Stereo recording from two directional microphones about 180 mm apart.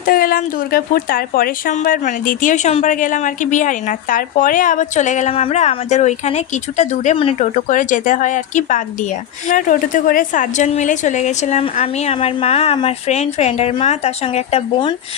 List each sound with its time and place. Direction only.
0.0 s a woman's voice: 50° left (ahead or behind); by 14.9 s 30° left (ahead or behind)